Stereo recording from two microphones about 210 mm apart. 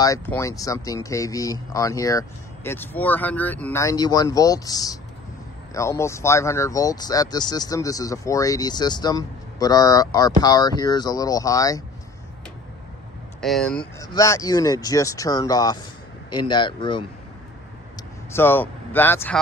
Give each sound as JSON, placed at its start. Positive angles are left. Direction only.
{"t": 0.0, "sound": "speech", "side_deg": 15}
{"t": 13.4, "sound": "speech", "side_deg": 0}
{"t": 13.9, "sound": "speech", "side_deg": 15}
{"t": 18.3, "sound": "speech", "side_deg": 10}